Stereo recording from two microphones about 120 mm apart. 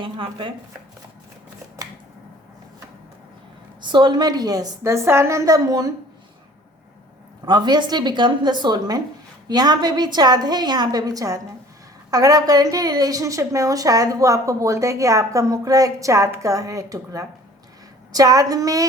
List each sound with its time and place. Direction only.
0.0 s speech: 45° right (ahead or behind)
3.8 s a woman's voice: 40° right (ahead or behind)
7.4 s a woman's voice: 35° right (ahead or behind)